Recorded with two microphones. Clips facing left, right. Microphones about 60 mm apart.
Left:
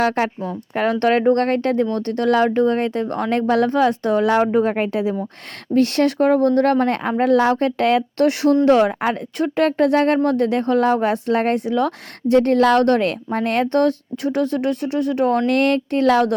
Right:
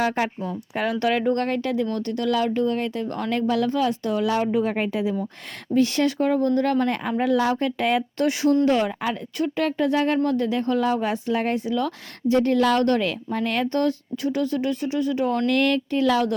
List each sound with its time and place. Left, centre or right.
0.4 s speech: left
8.6 s speech: left